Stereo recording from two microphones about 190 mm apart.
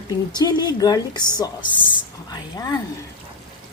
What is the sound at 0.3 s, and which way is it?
A woman's voice, 20° left (ahead or behind).